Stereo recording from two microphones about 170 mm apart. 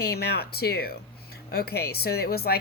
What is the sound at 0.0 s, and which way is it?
A woman's voice, 70° left (ahead or behind).